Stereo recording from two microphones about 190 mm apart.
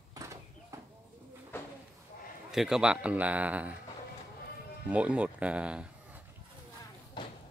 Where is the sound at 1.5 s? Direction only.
10° left (ahead or behind).